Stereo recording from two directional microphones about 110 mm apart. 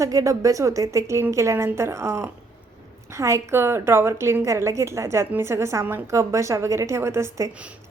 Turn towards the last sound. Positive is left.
turn(degrees=-25)  # may be behind; listen again after turning